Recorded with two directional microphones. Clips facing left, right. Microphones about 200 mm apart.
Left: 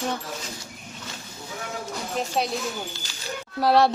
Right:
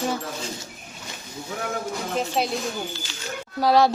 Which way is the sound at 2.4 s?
Centre (ahead or behind).